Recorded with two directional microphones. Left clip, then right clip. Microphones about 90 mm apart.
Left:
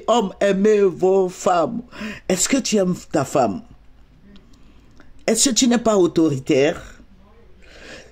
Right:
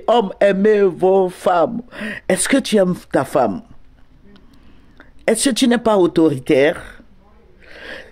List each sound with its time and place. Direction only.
0.0 s speech: 30° left (ahead or behind)
4.9 s a sound: 20° left (ahead or behind)
5.4 s speech: 20° left (ahead or behind)
7.6 s gasp: 20° left (ahead or behind)